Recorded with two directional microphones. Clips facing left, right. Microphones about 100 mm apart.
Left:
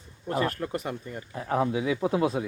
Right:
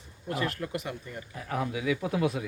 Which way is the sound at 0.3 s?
35° left (ahead or behind).